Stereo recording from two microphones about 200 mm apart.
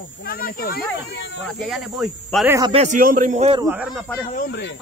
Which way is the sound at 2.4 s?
15° right (ahead or behind).